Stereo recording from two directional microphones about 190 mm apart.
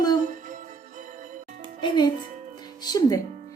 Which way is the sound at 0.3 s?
45° right (ahead or behind).